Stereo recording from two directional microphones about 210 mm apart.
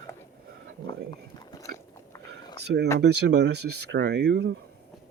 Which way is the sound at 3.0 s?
55° right (ahead or behind).